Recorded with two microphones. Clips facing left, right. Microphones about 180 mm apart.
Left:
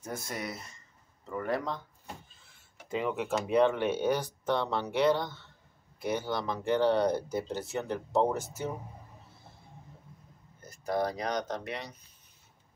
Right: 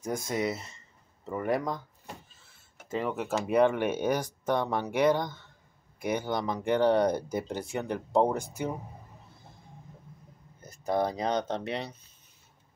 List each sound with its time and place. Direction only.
0.0 s speech: 15° right (ahead or behind)
2.9 s speech: centre (ahead or behind)
10.6 s speech: 20° right (ahead or behind)